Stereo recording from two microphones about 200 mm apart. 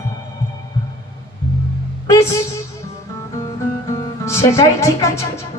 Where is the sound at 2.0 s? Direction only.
15° left (ahead or behind).